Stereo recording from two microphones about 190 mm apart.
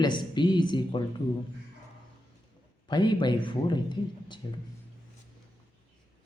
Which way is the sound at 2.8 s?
25° left (ahead or behind).